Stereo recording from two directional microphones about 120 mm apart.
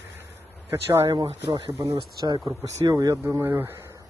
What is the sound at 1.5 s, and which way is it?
Speech, 40° right (ahead or behind).